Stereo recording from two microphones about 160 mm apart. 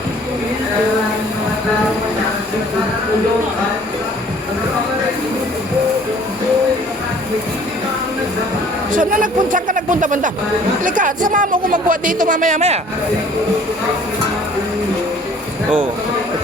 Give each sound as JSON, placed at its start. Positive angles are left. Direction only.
{"t": 8.9, "sound": "speech", "side_deg": -60}